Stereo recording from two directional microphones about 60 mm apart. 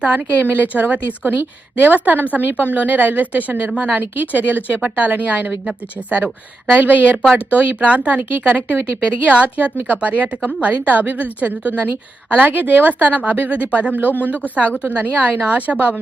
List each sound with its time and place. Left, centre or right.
0.0 s a woman's voice: right
4.0 s a woman's voice: right